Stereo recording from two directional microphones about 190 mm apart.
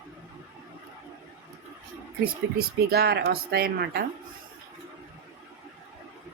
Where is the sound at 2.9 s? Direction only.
55° right (ahead or behind).